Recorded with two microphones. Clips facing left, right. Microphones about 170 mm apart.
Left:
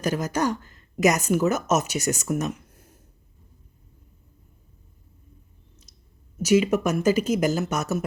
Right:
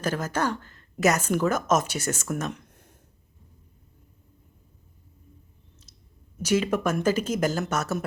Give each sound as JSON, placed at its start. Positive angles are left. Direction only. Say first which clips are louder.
{"t": 0.0, "sound": "a woman's voice", "louder": "left 2 dB", "side_deg": 10}
{"t": 6.4, "sound": "speech", "louder": "left 4 dB", "side_deg": 10}